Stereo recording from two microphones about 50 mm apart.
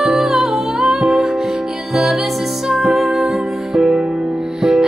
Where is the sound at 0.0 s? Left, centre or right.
Centre.